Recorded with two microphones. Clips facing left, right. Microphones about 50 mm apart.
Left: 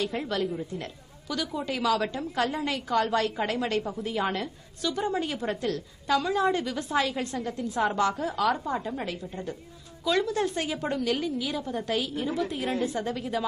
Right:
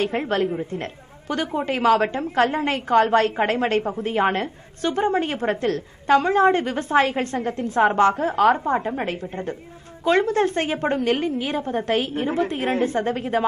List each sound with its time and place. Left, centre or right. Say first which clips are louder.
0.0 s a woman's voice: right 7 dB; right